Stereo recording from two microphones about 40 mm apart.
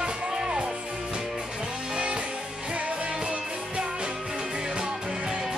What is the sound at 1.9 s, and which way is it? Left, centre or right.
Music, right.